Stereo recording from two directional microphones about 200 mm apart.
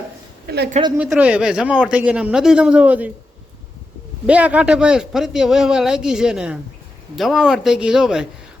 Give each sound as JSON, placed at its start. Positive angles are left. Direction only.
{"t": 0.5, "sound": "a woman's voice", "side_deg": -50}
{"t": 0.9, "sound": "speech", "side_deg": -5}
{"t": 4.3, "sound": "speech", "side_deg": -5}